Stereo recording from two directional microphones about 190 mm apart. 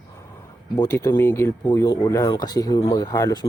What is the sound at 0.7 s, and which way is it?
Speech, 15° left (ahead or behind).